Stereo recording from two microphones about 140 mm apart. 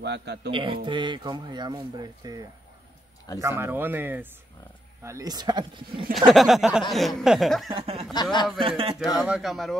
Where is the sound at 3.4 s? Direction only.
15° right (ahead or behind).